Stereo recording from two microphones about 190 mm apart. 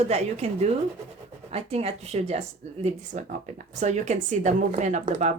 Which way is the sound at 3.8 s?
40° right (ahead or behind).